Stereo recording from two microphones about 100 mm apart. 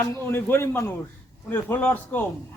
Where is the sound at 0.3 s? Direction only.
20° left (ahead or behind).